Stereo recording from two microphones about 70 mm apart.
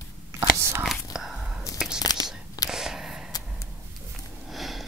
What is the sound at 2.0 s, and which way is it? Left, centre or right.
Whispering, left.